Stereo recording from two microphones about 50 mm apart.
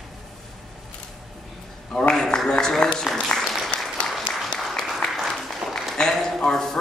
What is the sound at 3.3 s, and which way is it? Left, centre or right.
Applause, centre.